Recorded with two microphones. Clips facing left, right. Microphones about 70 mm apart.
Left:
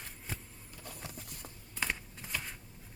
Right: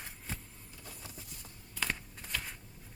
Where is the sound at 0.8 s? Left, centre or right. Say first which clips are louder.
Left 4 dB; left.